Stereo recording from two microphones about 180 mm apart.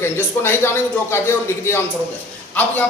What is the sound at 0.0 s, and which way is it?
A man's voice, 10° left (ahead or behind).